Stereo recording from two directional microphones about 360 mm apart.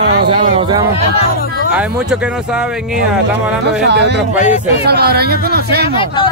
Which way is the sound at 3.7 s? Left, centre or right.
Right.